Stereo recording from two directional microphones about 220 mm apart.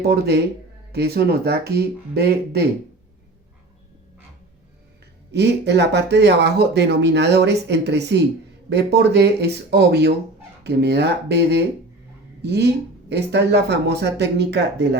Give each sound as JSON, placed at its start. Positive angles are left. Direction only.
{"t": 0.0, "sound": "speech", "side_deg": -45}
{"t": 5.3, "sound": "speech", "side_deg": -50}